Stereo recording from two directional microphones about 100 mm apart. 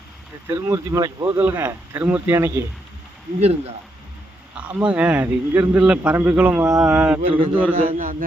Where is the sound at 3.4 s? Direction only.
90° right.